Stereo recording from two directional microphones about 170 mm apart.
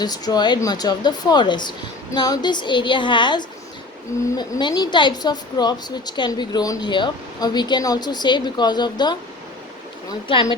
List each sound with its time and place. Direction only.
0.0 s a woman's voice: 25° left (ahead or behind)